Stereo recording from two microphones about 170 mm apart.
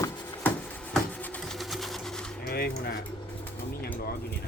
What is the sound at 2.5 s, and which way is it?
Speech, 70° left (ahead or behind).